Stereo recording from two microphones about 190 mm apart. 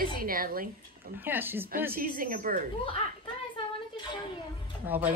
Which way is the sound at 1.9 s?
50° right (ahead or behind).